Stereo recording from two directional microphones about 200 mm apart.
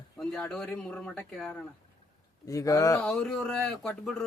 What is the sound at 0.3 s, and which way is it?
Speech, centre (ahead or behind).